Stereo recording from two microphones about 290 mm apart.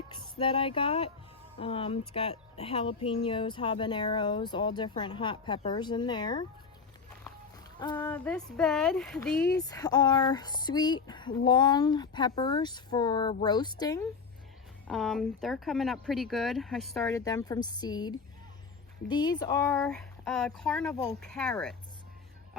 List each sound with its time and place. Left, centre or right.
0.1 s speech: centre
7.8 s speech: centre
14.8 s speech: centre
17.2 s speech: centre